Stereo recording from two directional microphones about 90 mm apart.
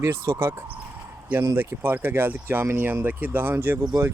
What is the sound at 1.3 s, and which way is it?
Speech, 25° right (ahead or behind).